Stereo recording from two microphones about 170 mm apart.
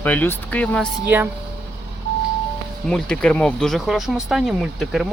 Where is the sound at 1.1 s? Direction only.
10° right (ahead or behind).